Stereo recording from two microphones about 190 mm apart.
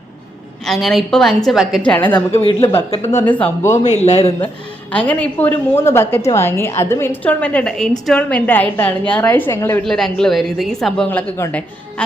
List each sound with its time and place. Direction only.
0.6 s a woman's voice: centre (ahead or behind)
2.3 s a man's voice: 30° left (ahead or behind)
3.1 s a woman's voice: 15° left (ahead or behind)
4.0 s a man's voice: 35° left (ahead or behind)
4.9 s a woman's voice: 5° left (ahead or behind)
9.8 s a woman's voice: centre (ahead or behind)